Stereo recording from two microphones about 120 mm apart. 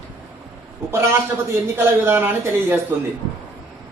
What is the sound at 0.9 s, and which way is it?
Speech, 20° right (ahead or behind).